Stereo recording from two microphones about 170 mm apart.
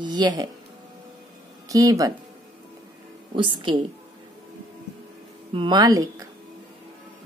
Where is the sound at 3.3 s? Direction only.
30° right (ahead or behind).